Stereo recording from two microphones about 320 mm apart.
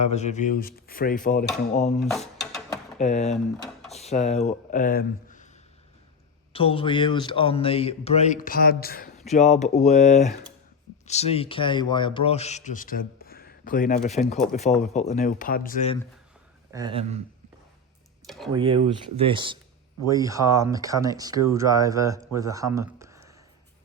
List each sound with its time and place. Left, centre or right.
0.0 s speech: left
2.0 s a sound: centre
3.0 s speech: left
6.5 s a man's voice: centre
16.7 s speech: centre
18.3 s speech: centre
18.5 s speech: centre